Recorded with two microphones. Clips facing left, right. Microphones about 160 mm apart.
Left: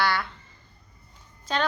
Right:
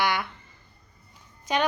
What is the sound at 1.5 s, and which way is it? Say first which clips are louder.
Speech: right 2 dB; 15° right (ahead or behind).